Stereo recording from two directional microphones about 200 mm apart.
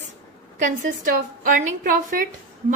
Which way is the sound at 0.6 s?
40° right (ahead or behind).